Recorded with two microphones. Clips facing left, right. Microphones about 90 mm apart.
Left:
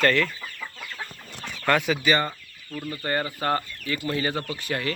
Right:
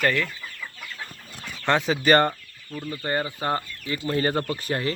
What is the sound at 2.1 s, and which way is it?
Chicken, 60° right (ahead or behind).